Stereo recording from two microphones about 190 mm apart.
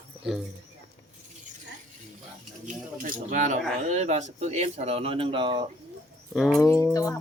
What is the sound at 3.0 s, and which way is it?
Speech, 45° right (ahead or behind).